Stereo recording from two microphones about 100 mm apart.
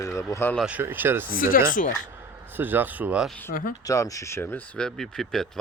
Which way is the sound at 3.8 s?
35° left (ahead or behind).